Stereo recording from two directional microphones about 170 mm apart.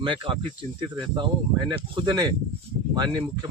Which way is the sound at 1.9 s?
25° right (ahead or behind).